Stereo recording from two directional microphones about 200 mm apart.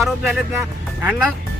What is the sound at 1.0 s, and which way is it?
Speech, 5° right (ahead or behind).